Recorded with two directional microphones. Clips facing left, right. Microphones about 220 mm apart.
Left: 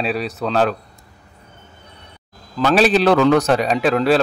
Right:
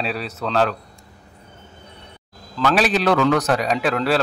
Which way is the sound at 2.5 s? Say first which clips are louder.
Left 4 dB; 25° left (ahead or behind).